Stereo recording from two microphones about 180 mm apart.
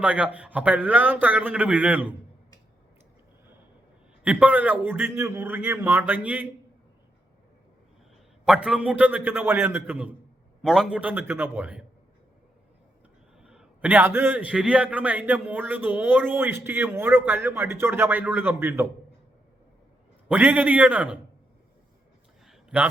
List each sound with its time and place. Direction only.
0.0 s a man's voice: 5° right (ahead or behind)
4.2 s a man's voice: 5° right (ahead or behind)
8.4 s a man's voice: 5° right (ahead or behind)
13.4 s a man's voice: 5° right (ahead or behind)
20.2 s a man's voice: 5° right (ahead or behind)
22.4 s a sound: 5° right (ahead or behind)